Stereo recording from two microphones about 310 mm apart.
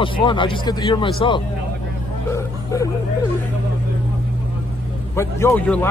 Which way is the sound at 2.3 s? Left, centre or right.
Centre.